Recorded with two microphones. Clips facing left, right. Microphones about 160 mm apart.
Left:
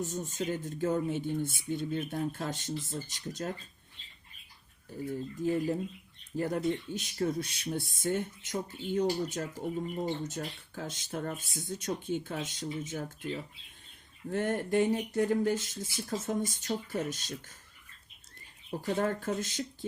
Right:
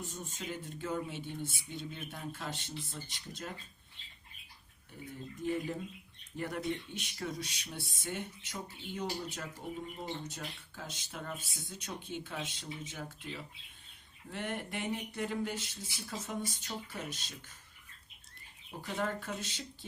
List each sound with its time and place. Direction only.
0.0 s speech: 45° left (ahead or behind)
5.4 s speech: 35° left (ahead or behind)
18.8 s speech: 45° left (ahead or behind)